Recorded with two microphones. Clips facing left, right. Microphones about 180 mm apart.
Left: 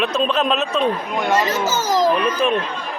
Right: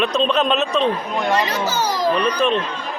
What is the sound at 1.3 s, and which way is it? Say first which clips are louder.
Speech: left 2 dB; 45° left (ahead or behind).